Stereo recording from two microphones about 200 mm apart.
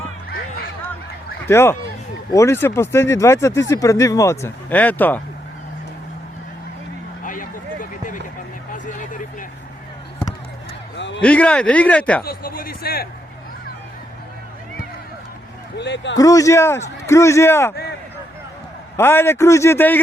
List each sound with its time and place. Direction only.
1.5 s speech: 10° left (ahead or behind)
7.3 s a sound: 40° left (ahead or behind)
10.9 s a sound: 65° left (ahead or behind)
11.2 s speech: 5° left (ahead or behind)
12.2 s speech: 50° left (ahead or behind)
15.8 s speech: 60° left (ahead or behind)
16.1 s speech: 15° left (ahead or behind)
18.9 s speech: 10° left (ahead or behind)